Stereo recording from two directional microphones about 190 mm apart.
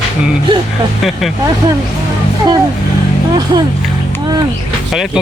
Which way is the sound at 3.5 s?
25° right (ahead or behind).